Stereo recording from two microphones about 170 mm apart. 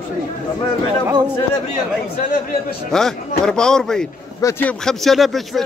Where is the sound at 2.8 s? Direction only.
5° left (ahead or behind).